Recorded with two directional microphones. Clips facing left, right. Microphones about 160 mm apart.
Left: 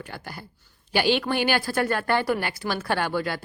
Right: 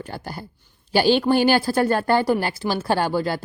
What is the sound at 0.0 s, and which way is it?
A woman's voice, 35° right (ahead or behind).